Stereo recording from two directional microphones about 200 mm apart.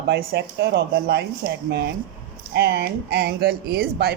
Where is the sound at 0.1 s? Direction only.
55° right (ahead or behind).